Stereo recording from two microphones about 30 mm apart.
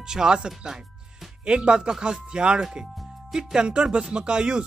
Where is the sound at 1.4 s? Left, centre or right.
Right.